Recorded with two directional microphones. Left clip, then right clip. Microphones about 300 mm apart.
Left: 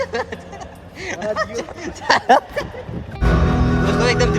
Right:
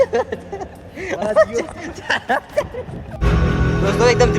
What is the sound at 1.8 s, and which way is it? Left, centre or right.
Speech, centre.